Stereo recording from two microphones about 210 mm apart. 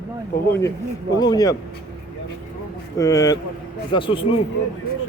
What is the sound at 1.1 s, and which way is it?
Speech, 20° left (ahead or behind).